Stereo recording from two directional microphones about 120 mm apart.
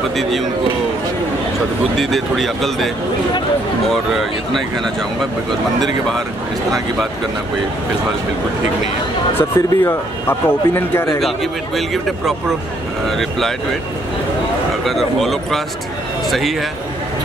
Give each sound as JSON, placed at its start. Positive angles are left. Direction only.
{"t": 2.0, "sound": "speech", "side_deg": 0}
{"t": 3.9, "sound": "speech", "side_deg": 0}
{"t": 5.8, "sound": "speech", "side_deg": 5}
{"t": 9.3, "sound": "speech", "side_deg": 20}
{"t": 11.1, "sound": "speech", "side_deg": 0}
{"t": 14.9, "sound": "a man's voice", "side_deg": 0}